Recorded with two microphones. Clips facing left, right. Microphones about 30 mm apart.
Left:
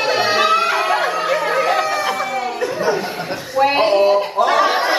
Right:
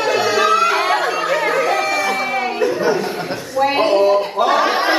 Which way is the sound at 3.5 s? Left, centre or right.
Centre.